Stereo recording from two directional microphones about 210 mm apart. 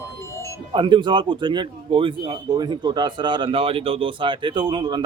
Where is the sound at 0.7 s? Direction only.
20° right (ahead or behind).